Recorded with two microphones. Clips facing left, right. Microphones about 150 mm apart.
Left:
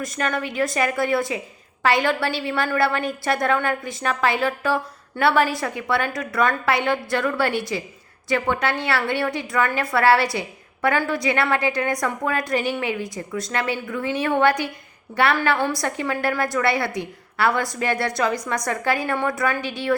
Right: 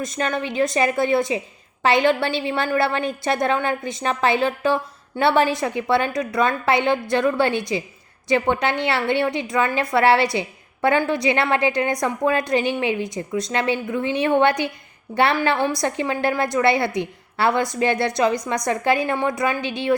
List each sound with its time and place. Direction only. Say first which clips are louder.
0.0 s a woman's voice: right 1 dB; 25° right (ahead or behind)